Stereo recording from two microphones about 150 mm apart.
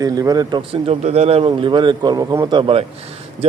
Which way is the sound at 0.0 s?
25° right (ahead or behind).